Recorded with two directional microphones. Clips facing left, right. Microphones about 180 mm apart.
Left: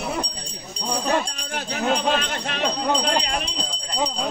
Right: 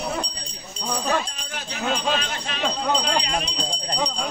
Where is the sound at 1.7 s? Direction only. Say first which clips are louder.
Left 3 dB; 50° left (ahead or behind).